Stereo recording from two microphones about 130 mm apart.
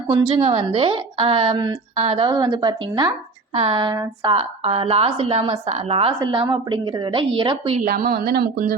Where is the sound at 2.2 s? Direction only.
30° right (ahead or behind).